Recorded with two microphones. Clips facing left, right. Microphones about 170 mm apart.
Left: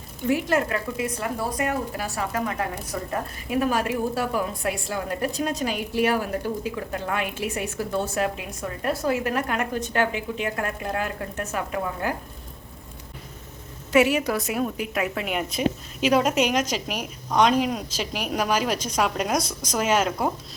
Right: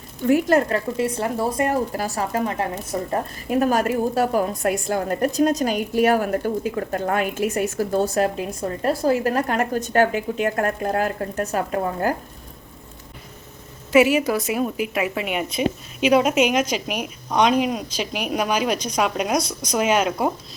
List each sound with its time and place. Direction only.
0.3 s a woman's voice: 45° right (ahead or behind)
3.1 s a woman's voice: 40° right (ahead or behind)
13.9 s a woman's voice: 5° right (ahead or behind)